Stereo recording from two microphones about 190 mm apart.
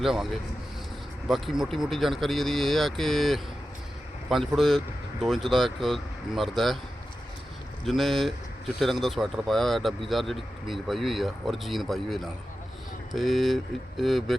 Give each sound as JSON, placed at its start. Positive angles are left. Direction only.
{"t": 0.0, "sound": "speech", "side_deg": 0}
{"t": 7.9, "sound": "speech", "side_deg": 0}